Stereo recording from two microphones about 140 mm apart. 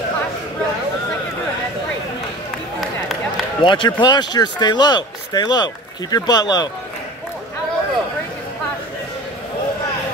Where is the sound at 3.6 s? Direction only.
35° left (ahead or behind).